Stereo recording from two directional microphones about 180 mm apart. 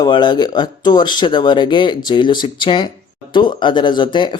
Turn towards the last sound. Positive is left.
turn(degrees=25)  # may be behind; listen again after turning